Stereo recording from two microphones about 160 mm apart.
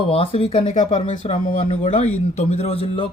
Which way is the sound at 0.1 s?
40° left (ahead or behind).